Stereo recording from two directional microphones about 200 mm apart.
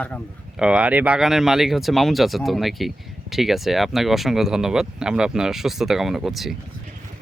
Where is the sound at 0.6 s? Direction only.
5° right (ahead or behind).